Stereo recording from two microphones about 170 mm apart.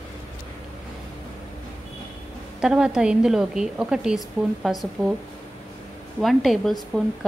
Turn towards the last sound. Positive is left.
turn(degrees=5)  # may be behind; listen again after turning